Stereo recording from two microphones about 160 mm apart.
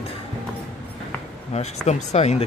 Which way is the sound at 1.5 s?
45° left (ahead or behind).